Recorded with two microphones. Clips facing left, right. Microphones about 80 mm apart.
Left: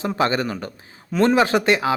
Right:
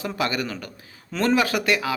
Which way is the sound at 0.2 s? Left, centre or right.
Left.